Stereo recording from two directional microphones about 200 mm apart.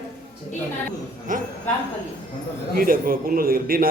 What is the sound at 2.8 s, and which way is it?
A man's voice, 45° right (ahead or behind).